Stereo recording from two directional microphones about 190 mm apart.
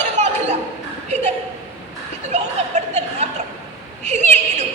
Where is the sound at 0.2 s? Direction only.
40° right (ahead or behind).